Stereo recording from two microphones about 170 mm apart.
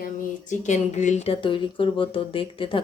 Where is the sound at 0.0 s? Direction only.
45° left (ahead or behind).